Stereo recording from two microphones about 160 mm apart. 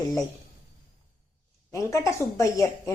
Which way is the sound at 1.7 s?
20° left (ahead or behind).